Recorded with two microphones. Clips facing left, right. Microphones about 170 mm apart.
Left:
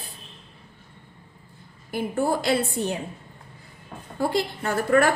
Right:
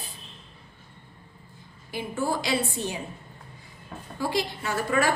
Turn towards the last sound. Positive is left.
turn(degrees=55)  # may be behind; listen again after turning